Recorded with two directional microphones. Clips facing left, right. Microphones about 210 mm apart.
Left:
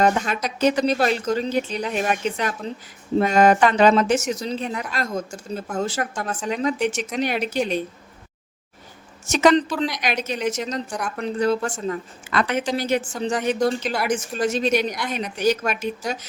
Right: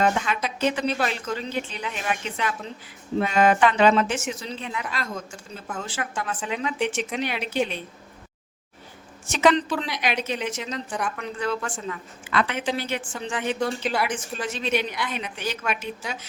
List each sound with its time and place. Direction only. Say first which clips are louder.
0.0 s a woman's voice: left 3 dB; 40° left (ahead or behind)
9.3 s a woman's voice: left 3 dB; 40° left (ahead or behind)